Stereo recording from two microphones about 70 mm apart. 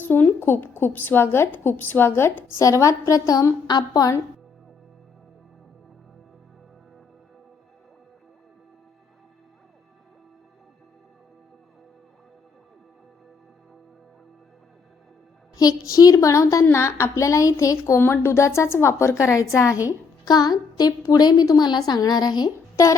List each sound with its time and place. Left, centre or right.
0.0 s a woman's voice: left
2.6 s a woman's voice: left
3.7 s a woman's voice: left
15.5 s a woman's voice: left
18.0 s a woman's voice: left
20.2 s a woman's voice: left
22.7 s a child's voice: left